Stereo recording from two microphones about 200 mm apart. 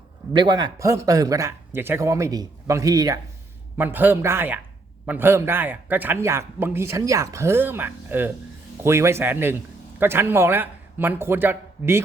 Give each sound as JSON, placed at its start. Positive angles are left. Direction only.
{"t": 0.3, "sound": "a man's voice", "side_deg": -20}